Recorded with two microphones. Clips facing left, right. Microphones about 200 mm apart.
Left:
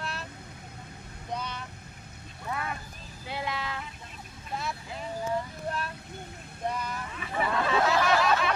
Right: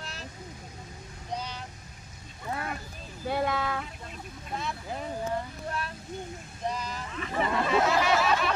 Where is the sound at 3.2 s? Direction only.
50° right (ahead or behind).